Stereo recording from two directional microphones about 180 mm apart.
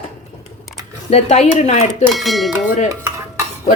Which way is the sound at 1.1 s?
35° left (ahead or behind).